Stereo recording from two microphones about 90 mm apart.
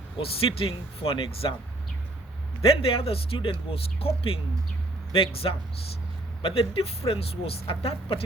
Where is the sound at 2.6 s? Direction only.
90° left.